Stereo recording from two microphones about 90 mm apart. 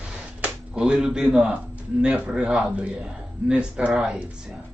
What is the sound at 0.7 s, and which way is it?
Speech, 10° right (ahead or behind).